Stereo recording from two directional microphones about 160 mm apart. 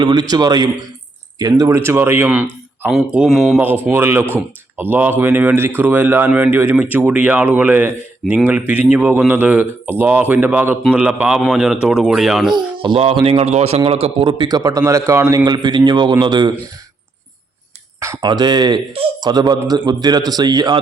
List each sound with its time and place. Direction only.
0.0 s speech: 25° right (ahead or behind); by 3.6 s centre (ahead or behind)
3.6 s a man's voice: 10° right (ahead or behind)
12.5 s speech: 30° right (ahead or behind)
18.0 s speech: 20° right (ahead or behind)